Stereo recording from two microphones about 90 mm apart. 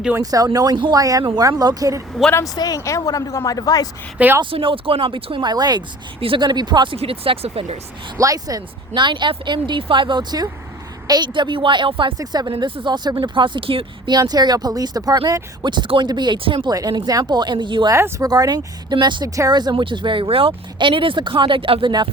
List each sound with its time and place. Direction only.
0.2 s speech: 40° right (ahead or behind)
2.6 s speech: 45° left (ahead or behind)
4.2 s speech: 15° right (ahead or behind)
4.5 s speech: 85° right; by 5.8 s 50° right (ahead or behind)
6.1 s speech: 90° right
6.4 s speech: 55° right (ahead or behind)
6.9 s speech: 90° right
8.2 s speech: 40° right (ahead or behind)
9.0 s speech: 60° right (ahead or behind)
12.1 s speech: 45° right (ahead or behind)
13.1 s speech: 65° right (ahead or behind); by 14.1 s 85° right
14.1 s speech: 50° right (ahead or behind); by 16.6 s 65° right (ahead or behind)
16.6 s speech: 45° right (ahead or behind); by 17.8 s 60° right (ahead or behind)
18.2 s speech: 45° right (ahead or behind); by 22.1 s 65° right (ahead or behind)